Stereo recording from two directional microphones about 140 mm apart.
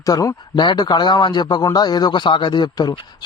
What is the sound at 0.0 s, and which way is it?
A man's voice, 25° left (ahead or behind).